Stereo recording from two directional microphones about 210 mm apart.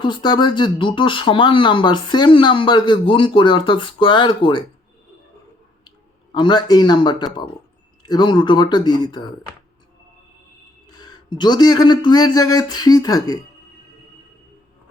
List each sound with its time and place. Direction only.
0.0 s speech: 20° left (ahead or behind)
6.3 s speech: 20° left (ahead or behind)
11.0 s speech: 20° left (ahead or behind)